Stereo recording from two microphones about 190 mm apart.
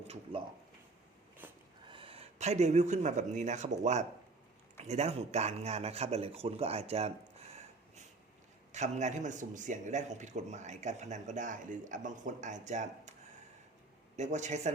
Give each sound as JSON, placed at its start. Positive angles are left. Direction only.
{"t": 1.4, "sound": "a sound", "side_deg": -10}
{"t": 1.9, "sound": "a man's voice", "side_deg": -30}
{"t": 14.2, "sound": "a man's voice", "side_deg": -40}